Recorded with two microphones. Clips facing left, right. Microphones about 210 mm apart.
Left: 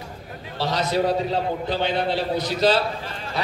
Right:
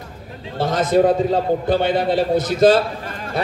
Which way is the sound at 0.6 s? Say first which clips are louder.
Right 7 dB; 50° right (ahead or behind).